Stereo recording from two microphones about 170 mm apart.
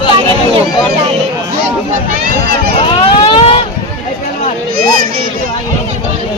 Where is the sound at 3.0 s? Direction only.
35° left (ahead or behind).